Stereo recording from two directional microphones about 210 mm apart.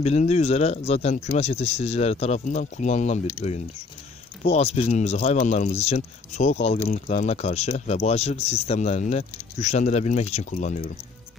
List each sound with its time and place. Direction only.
0.0 s speech: 30° left (ahead or behind)